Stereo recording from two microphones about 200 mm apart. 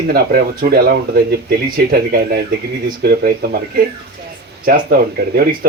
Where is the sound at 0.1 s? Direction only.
50° right (ahead or behind).